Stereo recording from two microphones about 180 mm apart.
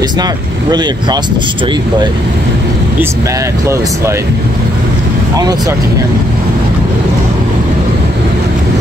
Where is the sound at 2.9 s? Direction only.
15° right (ahead or behind).